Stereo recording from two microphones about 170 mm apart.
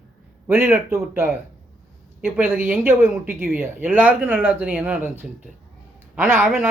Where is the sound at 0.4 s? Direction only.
15° right (ahead or behind).